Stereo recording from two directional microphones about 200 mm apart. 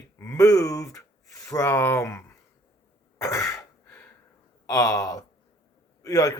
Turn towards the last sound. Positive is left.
turn(degrees=15)  # may be behind; listen again after turning